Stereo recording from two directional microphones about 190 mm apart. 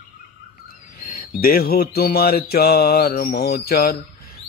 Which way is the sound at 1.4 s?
50° left (ahead or behind).